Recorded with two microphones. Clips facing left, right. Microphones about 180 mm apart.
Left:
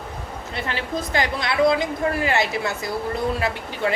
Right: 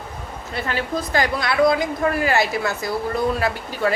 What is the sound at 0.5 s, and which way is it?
A woman's voice, 25° left (ahead or behind).